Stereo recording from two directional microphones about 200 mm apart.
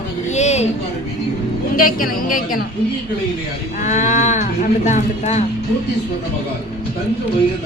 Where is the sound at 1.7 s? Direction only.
45° left (ahead or behind).